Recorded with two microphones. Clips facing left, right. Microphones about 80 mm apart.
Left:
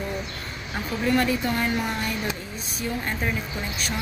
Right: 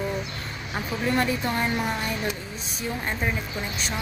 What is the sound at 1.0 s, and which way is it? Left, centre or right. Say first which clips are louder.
Speech: left 2 dB; right.